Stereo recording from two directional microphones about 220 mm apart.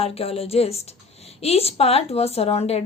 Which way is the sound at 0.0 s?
25° left (ahead or behind).